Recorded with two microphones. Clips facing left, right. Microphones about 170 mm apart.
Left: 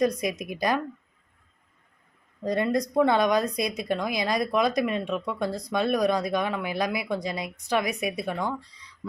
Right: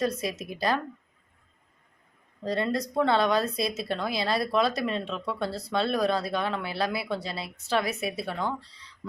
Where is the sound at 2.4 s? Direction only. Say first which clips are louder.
Left 3 dB; 15° left (ahead or behind).